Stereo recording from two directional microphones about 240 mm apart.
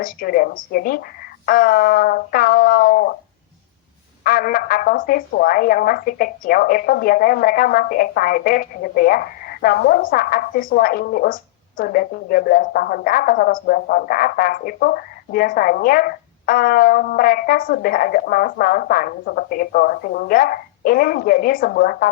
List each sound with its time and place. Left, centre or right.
0.0 s speech: left
4.2 s speech: left